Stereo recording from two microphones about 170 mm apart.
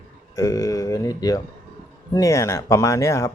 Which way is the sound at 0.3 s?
20° left (ahead or behind).